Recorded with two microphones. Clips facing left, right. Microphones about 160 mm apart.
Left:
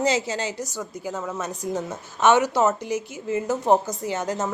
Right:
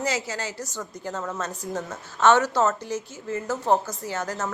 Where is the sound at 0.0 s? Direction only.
20° left (ahead or behind).